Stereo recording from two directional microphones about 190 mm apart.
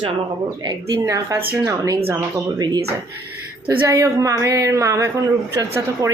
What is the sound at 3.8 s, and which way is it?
Speech, 15° right (ahead or behind).